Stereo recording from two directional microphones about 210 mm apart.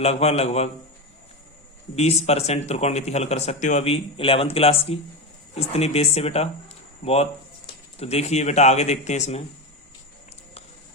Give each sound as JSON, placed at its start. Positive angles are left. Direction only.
{"t": 0.0, "sound": "a man's voice", "side_deg": 30}
{"t": 2.0, "sound": "a man's voice", "side_deg": 30}